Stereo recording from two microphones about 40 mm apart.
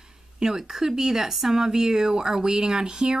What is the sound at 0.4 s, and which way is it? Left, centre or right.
Speech, centre.